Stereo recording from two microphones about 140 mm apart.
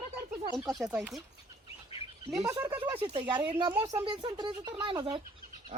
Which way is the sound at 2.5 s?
20° right (ahead or behind).